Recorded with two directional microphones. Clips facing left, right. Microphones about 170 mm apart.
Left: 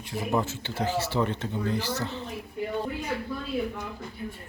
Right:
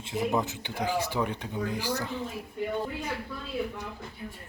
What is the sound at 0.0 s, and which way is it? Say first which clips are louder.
Speech: even; 20° right (ahead or behind).